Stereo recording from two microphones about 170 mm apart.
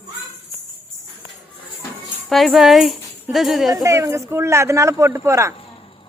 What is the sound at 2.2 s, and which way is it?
Speech, centre (ahead or behind).